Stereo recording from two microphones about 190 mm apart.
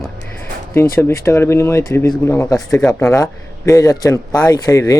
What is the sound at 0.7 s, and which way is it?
Speech, 15° left (ahead or behind).